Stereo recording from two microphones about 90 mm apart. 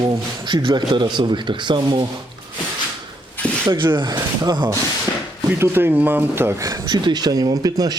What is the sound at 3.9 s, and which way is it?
Speech, 60° right (ahead or behind).